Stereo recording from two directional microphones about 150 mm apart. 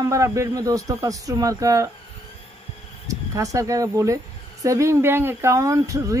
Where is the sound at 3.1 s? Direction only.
20° right (ahead or behind).